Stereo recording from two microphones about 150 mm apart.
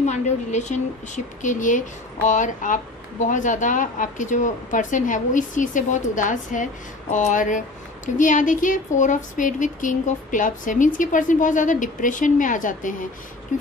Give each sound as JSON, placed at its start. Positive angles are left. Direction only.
{"t": 0.0, "sound": "a woman's voice", "side_deg": 50}